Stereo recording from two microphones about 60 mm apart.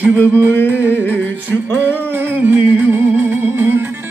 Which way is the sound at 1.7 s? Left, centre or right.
Left.